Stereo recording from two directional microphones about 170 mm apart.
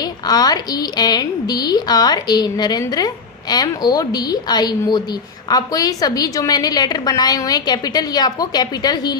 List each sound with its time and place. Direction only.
0.3 s a woman's voice: 25° left (ahead or behind)